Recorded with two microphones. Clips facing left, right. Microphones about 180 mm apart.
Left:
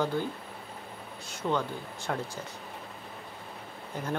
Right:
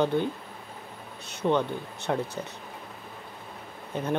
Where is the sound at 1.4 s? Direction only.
20° right (ahead or behind).